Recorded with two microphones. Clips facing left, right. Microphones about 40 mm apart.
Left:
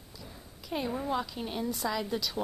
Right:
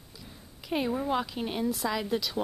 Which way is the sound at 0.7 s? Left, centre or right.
Right.